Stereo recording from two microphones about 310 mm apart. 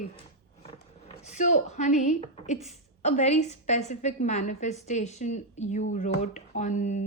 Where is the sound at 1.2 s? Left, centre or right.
Left.